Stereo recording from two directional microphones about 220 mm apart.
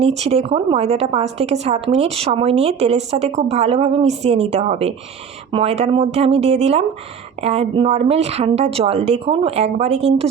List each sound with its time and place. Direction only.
0.0 s a woman's voice: 30° right (ahead or behind)